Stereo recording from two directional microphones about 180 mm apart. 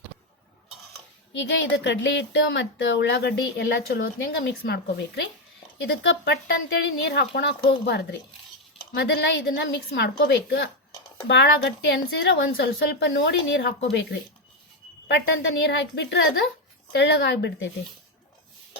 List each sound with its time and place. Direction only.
1.3 s a woman's voice: 80° left
9.0 s a woman's voice: 85° left
15.6 s a woman's voice: 90° left